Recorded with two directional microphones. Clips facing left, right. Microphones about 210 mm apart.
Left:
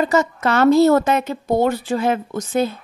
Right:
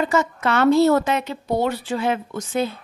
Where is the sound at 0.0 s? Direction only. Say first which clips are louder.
Left 3 dB; 40° left (ahead or behind).